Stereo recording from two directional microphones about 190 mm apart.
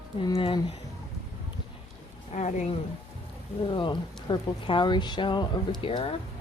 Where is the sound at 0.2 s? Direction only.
25° left (ahead or behind).